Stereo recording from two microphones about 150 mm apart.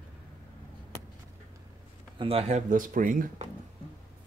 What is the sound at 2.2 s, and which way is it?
Speech, 40° right (ahead or behind).